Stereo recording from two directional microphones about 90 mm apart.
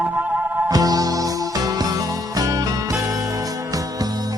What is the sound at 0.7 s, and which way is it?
Music, 45° right (ahead or behind).